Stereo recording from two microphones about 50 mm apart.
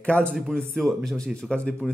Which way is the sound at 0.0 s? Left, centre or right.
Left.